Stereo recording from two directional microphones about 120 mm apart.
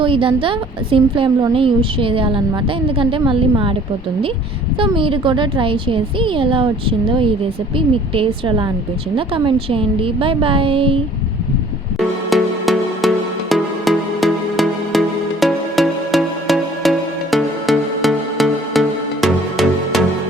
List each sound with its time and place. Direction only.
0.0 s a woman's voice: 45° right (ahead or behind)
4.8 s a woman's voice: 45° right (ahead or behind)
11.9 s music: centre (ahead or behind)